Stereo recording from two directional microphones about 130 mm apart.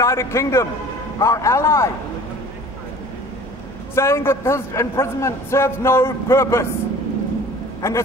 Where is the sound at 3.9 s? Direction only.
20° left (ahead or behind).